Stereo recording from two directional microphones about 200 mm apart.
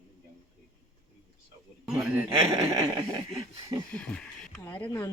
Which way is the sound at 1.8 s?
Centre (ahead or behind).